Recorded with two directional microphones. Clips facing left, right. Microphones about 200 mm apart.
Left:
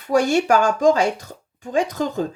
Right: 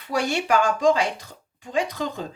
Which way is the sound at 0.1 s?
45° left (ahead or behind).